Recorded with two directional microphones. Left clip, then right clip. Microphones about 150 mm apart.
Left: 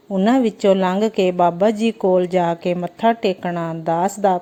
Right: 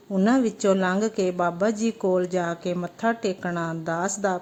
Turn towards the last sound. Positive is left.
turn(degrees=15)  # may be behind; listen again after turning